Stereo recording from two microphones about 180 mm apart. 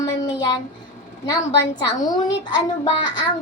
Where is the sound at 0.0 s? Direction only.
20° left (ahead or behind).